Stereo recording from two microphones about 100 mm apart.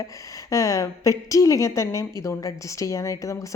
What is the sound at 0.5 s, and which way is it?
A woman's voice, 35° left (ahead or behind).